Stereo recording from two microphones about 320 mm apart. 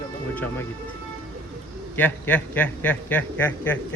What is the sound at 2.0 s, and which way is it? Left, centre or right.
A man's voice, centre.